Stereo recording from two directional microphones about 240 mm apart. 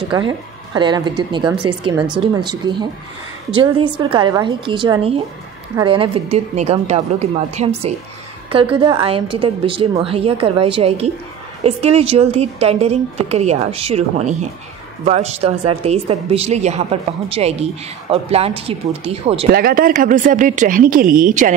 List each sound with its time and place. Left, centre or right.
0.1 s a woman's voice: centre
19.5 s speech: right